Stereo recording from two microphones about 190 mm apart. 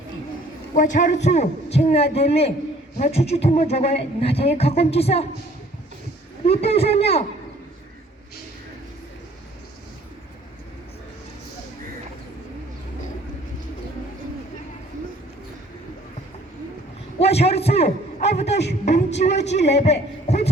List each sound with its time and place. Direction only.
0.7 s speech: 40° left (ahead or behind)
6.4 s speech: 30° left (ahead or behind)
17.2 s a man's voice: 35° left (ahead or behind)